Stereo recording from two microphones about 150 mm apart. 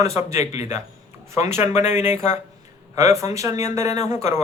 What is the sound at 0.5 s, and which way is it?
Speech, 45° left (ahead or behind).